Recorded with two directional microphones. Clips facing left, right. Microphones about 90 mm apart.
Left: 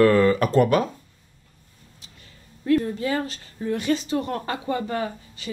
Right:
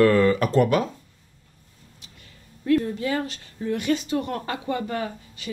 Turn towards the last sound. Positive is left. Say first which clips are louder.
# left 2 dB
turn(degrees=30)  # may be behind; listen again after turning